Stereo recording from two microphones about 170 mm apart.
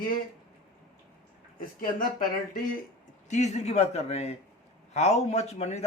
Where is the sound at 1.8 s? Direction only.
55° left (ahead or behind).